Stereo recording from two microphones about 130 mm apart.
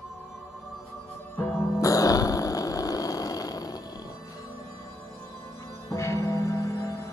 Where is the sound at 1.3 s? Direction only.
25° left (ahead or behind).